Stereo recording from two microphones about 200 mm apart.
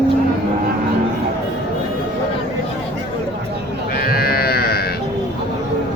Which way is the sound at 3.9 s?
50° left (ahead or behind).